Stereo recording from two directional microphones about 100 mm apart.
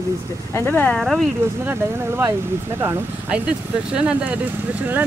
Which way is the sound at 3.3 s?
10° right (ahead or behind).